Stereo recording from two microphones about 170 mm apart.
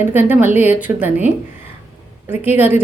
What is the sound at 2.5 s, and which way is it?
Speech, 10° right (ahead or behind).